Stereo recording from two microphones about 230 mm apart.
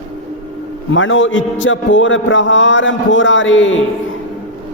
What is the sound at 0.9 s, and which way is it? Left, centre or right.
A man's voice, left.